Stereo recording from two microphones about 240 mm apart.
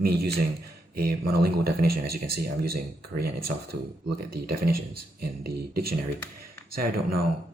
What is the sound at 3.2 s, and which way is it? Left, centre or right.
Speech, right.